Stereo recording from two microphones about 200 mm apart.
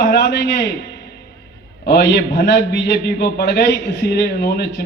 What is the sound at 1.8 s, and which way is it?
A man's voice, 55° left (ahead or behind).